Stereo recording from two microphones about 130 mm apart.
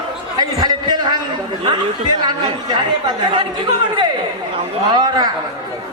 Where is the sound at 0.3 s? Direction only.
30° right (ahead or behind).